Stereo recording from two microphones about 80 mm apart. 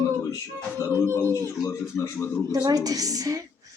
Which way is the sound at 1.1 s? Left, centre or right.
Left.